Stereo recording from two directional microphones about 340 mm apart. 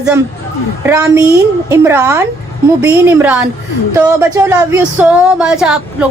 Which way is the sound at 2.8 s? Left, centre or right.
Centre.